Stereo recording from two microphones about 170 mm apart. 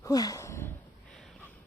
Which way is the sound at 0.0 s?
20° left (ahead or behind).